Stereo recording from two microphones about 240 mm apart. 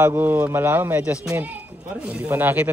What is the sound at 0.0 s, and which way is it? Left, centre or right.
Speech, centre.